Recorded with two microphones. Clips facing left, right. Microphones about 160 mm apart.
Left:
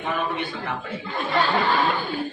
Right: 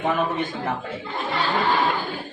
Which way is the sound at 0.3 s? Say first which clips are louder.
Right 3 dB; 45° right (ahead or behind).